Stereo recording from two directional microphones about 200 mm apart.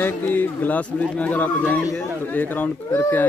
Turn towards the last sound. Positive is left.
turn(degrees=10)  # may be behind; listen again after turning